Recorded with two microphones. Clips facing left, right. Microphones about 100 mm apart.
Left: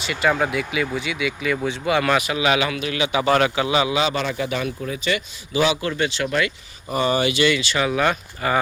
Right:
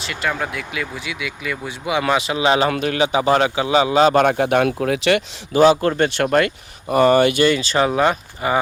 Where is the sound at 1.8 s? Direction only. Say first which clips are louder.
Right 2 dB; 15° right (ahead or behind).